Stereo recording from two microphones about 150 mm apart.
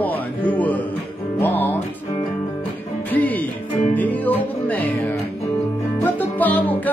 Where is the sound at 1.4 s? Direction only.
15° left (ahead or behind).